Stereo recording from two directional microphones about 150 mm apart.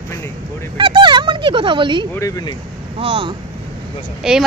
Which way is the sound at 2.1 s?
20° left (ahead or behind).